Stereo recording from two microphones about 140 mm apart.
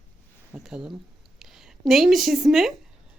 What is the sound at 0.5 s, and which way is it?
Speech, 5° right (ahead or behind).